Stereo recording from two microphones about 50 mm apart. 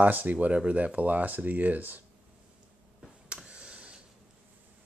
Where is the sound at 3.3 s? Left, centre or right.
Right.